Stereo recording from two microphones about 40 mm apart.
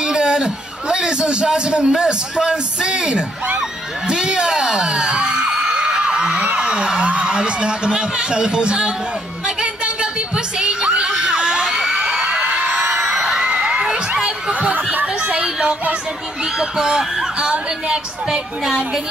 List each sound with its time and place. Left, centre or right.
0.0 s a man's voice: right
4.1 s a sound: right
7.1 s speech: right
9.6 s a sound: right
12.4 s music: right
13.2 s a sound: centre
13.5 s crowd: right
14.5 s snicker: right
16.5 s speech: centre